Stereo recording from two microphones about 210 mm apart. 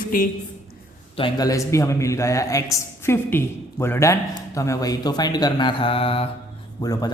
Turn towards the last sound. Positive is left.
turn(degrees=15)  # may be behind; listen again after turning